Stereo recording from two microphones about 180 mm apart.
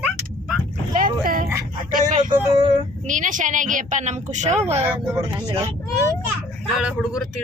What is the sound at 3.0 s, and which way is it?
A woman's voice, 45° right (ahead or behind).